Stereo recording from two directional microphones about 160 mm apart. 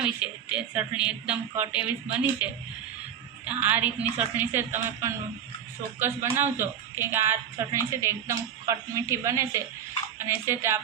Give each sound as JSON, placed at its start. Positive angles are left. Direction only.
{"t": 0.0, "sound": "a woman's voice", "side_deg": -5}